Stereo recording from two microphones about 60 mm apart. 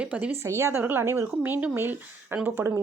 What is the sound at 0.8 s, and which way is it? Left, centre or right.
Speech, right.